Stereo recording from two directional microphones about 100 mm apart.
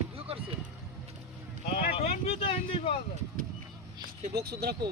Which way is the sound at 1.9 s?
80° left.